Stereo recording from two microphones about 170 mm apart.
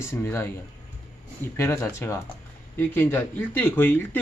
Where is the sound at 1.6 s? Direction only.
15° left (ahead or behind).